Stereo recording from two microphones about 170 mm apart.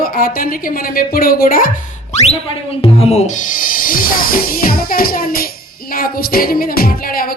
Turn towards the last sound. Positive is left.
turn(degrees=60)  # may be behind; listen again after turning